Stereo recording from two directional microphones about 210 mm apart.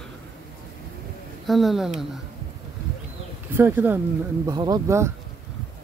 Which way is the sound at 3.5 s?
10° right (ahead or behind).